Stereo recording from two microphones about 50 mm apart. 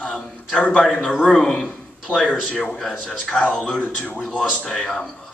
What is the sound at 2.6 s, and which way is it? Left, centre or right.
Speech, centre.